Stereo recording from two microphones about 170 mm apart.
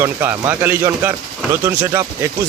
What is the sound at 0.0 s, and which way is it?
A man's voice, 10° right (ahead or behind).